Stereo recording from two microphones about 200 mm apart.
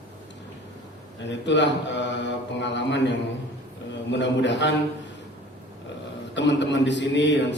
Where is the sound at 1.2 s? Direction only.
65° left (ahead or behind).